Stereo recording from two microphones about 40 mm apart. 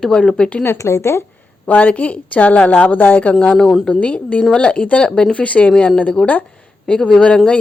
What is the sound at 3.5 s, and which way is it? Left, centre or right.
Speech, centre.